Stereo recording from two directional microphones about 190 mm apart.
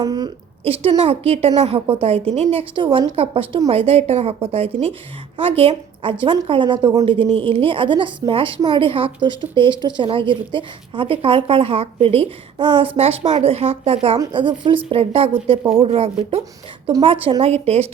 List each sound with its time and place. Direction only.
0.0 s a woman's voice: 20° right (ahead or behind)